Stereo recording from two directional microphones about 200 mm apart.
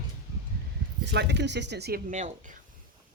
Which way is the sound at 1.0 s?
60° right (ahead or behind).